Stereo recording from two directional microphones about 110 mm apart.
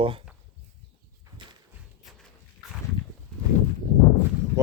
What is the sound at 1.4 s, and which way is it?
Walk, 45° right (ahead or behind).